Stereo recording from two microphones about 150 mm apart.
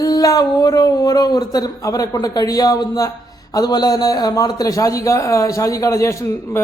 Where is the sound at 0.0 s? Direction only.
25° left (ahead or behind).